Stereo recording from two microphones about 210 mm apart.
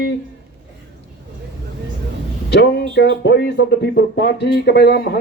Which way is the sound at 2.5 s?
50° left (ahead or behind).